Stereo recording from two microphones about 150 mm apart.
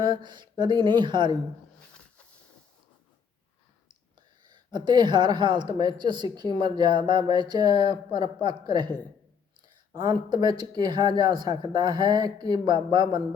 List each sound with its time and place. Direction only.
0.0 s speech: 30° right (ahead or behind)
4.7 s a woman's voice: 30° right (ahead or behind)
10.0 s a woman's voice: 30° right (ahead or behind)